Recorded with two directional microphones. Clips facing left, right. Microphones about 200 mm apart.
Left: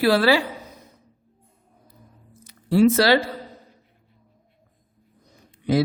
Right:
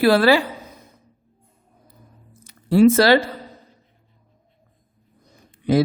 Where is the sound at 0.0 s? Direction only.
55° right (ahead or behind).